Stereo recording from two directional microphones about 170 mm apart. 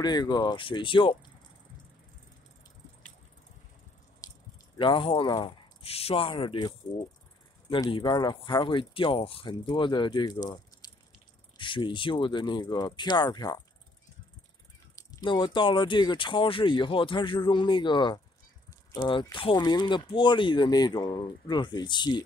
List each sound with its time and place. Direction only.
0.0 s speech: 25° left (ahead or behind)
4.2 s squish: 20° left (ahead or behind)
4.7 s speech: 30° left (ahead or behind)
15.0 s speech: 20° left (ahead or behind)